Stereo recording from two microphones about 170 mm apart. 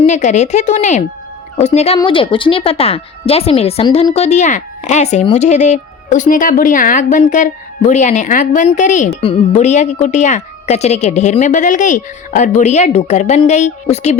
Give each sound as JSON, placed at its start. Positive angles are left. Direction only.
{"t": 0.0, "sound": "speech", "side_deg": 45}